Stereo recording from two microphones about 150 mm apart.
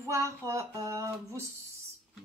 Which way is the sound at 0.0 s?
20° right (ahead or behind).